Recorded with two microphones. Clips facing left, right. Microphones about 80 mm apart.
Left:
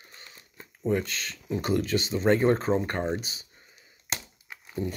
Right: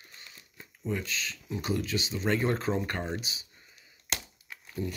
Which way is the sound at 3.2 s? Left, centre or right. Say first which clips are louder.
Even; left.